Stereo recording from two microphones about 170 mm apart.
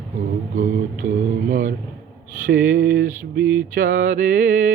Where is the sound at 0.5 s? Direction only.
50° right (ahead or behind).